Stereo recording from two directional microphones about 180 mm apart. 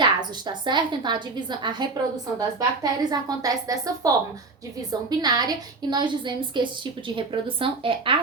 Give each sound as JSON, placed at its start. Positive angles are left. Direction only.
{"t": 0.0, "sound": "a woman's voice", "side_deg": -25}